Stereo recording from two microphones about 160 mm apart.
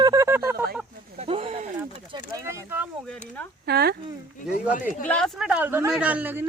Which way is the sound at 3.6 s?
80° right.